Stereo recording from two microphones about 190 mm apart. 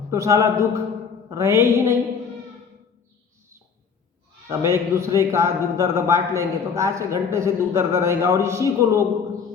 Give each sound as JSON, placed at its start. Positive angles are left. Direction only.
{"t": 0.1, "sound": "a man's voice", "side_deg": -15}
{"t": 4.4, "sound": "a man's voice", "side_deg": -15}